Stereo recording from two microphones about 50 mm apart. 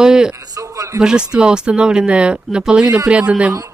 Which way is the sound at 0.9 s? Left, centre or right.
Centre.